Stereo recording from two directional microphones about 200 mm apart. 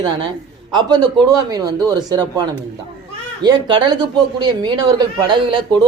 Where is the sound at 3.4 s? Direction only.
20° right (ahead or behind).